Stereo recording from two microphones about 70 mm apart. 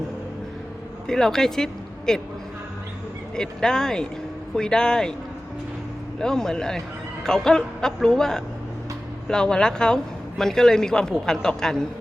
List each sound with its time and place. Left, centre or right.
1.0 s speech: centre
3.3 s speech: centre
6.1 s speech: centre